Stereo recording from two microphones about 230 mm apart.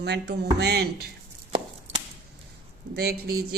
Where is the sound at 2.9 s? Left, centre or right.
Right.